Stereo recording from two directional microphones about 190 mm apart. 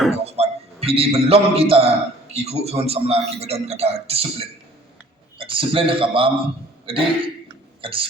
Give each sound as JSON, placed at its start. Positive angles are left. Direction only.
{"t": 0.3, "sound": "a man's voice", "side_deg": -35}
{"t": 5.4, "sound": "a man's voice", "side_deg": -25}
{"t": 6.8, "sound": "a sound", "side_deg": -30}